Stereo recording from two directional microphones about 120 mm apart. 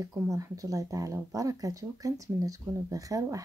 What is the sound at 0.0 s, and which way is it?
Speech, 30° right (ahead or behind).